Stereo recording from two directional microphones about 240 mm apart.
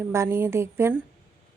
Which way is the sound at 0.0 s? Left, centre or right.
Centre.